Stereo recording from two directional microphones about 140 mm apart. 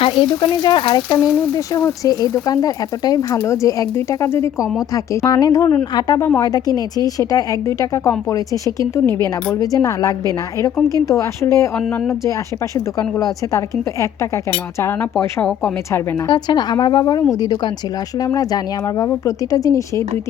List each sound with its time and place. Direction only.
0.0 s speech: 35° left (ahead or behind)
12.7 s speech: 25° left (ahead or behind)
15.4 s a woman's voice: 5° left (ahead or behind)
15.9 s speech: 30° left (ahead or behind)